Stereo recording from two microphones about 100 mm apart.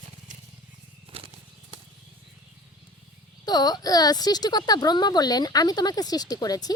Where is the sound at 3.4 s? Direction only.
40° left (ahead or behind).